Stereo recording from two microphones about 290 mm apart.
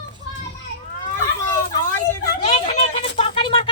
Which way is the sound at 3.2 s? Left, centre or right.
Centre.